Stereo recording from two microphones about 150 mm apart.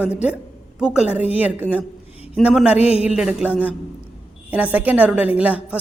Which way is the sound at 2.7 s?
45° left (ahead or behind).